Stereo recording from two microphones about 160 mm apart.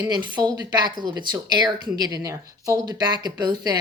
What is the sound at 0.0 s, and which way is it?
Speech, 25° right (ahead or behind).